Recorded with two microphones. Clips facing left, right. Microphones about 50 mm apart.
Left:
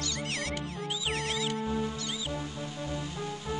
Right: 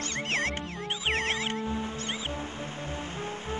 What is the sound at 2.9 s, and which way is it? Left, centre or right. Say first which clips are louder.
Music: even; right.